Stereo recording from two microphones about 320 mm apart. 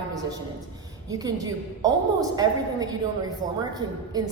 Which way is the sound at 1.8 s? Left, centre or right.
Centre.